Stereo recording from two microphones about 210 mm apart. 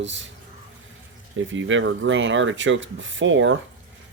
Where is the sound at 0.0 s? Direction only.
60° right (ahead or behind).